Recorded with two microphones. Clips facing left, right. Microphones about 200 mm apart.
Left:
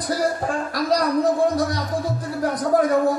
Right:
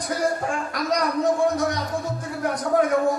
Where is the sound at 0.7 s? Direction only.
35° left (ahead or behind).